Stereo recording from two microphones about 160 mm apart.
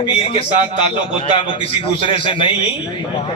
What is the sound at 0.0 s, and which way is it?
A man's voice, 35° left (ahead or behind).